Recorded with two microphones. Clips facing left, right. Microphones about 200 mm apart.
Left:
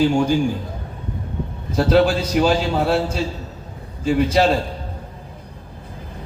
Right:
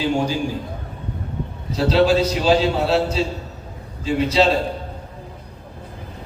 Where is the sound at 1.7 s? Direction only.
55° left (ahead or behind).